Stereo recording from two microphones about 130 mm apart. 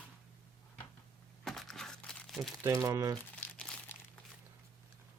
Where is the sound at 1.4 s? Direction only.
Centre (ahead or behind).